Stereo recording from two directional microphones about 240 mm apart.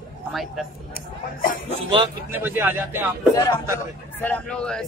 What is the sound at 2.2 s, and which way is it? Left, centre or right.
Speech, centre.